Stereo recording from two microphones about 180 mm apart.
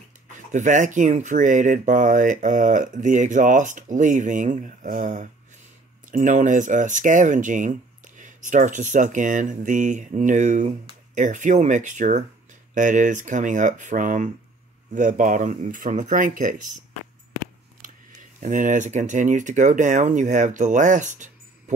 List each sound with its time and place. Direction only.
0.5 s speech: 45° right (ahead or behind)
18.4 s speech: 45° right (ahead or behind)